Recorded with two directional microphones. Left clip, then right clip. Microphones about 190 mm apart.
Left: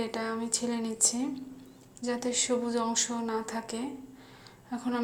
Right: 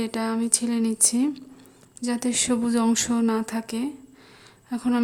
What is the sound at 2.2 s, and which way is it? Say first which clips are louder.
Speech: right 5 dB; 60° right (ahead or behind).